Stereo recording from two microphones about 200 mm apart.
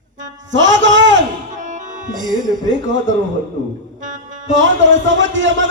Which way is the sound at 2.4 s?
40° right (ahead or behind).